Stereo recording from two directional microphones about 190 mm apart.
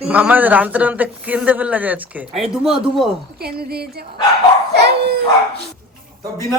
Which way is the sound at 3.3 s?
55° right (ahead or behind).